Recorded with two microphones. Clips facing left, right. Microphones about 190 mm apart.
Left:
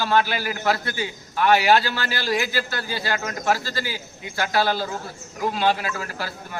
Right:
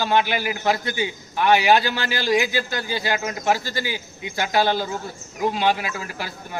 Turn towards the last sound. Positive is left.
turn(degrees=-15)  # may be behind; listen again after turning